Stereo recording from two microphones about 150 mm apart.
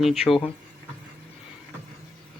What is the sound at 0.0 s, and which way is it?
Speech, centre (ahead or behind).